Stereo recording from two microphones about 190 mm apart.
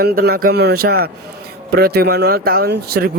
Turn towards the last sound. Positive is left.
turn(degrees=-55)  # may be behind; listen again after turning